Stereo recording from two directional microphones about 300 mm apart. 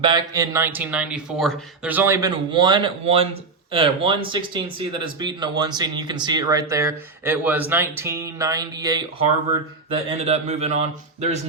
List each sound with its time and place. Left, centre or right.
0.0 s speech: centre